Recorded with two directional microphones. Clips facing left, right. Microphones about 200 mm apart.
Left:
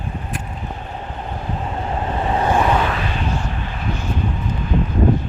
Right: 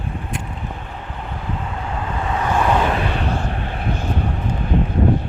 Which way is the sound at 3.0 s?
60° right (ahead or behind).